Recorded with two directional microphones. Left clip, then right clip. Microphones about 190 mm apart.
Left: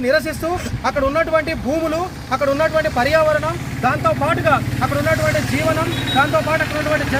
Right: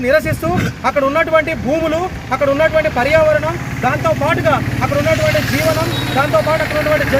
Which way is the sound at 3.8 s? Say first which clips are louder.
Right 2 dB; 15° right (ahead or behind).